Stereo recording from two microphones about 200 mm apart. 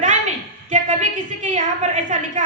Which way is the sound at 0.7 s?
40° right (ahead or behind).